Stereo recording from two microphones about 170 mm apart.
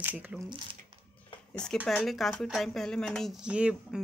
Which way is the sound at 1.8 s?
Centre (ahead or behind).